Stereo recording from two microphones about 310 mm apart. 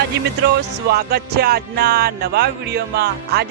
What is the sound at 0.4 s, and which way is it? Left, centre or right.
Music, right.